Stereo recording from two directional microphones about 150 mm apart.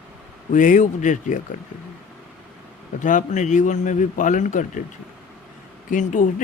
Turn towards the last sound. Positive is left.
turn(degrees=55)  # may be behind; listen again after turning